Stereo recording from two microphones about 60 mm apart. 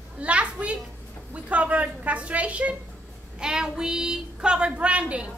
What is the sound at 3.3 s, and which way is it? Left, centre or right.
A woman's voice, centre.